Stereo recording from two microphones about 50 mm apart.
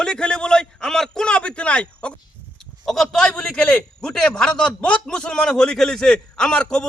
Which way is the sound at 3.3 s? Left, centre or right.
Centre.